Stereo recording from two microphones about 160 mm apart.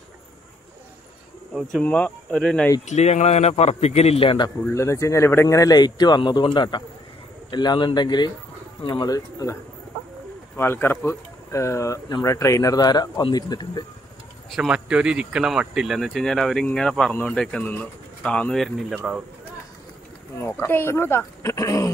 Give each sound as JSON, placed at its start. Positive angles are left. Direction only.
{"t": 1.5, "sound": "speech", "side_deg": 0}
{"t": 2.9, "sound": "a man's voice", "side_deg": 45}
{"t": 4.7, "sound": "speech", "side_deg": 20}
{"t": 14.5, "sound": "speech", "side_deg": -5}
{"t": 20.3, "sound": "speech", "side_deg": 15}